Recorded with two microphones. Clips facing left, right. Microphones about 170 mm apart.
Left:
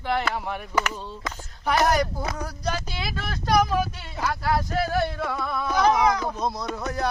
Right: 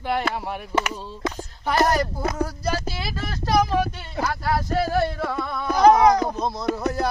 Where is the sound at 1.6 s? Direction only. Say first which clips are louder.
Right 1 dB; centre (ahead or behind).